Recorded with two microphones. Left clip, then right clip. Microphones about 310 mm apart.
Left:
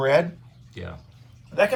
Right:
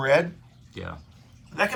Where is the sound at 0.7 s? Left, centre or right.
Centre.